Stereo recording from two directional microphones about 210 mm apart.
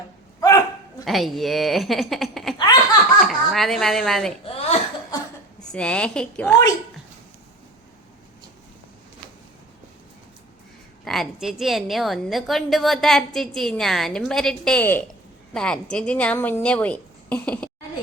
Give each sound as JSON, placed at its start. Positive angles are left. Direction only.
{"t": 0.3, "sound": "dog", "side_deg": 15}
{"t": 1.0, "sound": "a woman's voice", "side_deg": 0}
{"t": 4.4, "sound": "a sound", "side_deg": 30}
{"t": 5.7, "sound": "a woman's voice", "side_deg": 5}
{"t": 11.0, "sound": "a woman's voice", "side_deg": 0}